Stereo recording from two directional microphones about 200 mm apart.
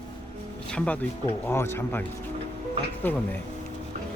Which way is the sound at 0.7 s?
5° left (ahead or behind).